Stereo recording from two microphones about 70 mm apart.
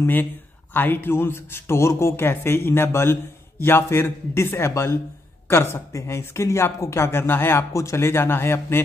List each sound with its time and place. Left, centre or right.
0.0 s speech: left
7.7 s speech: left